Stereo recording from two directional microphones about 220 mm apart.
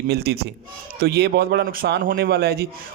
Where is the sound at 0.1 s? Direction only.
45° right (ahead or behind).